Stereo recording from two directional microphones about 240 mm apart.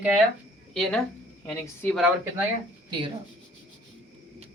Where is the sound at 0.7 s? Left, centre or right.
Centre.